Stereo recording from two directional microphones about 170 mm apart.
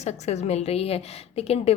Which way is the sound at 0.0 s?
40° left (ahead or behind).